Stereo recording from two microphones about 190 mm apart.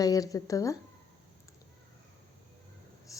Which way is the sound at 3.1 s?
15° left (ahead or behind).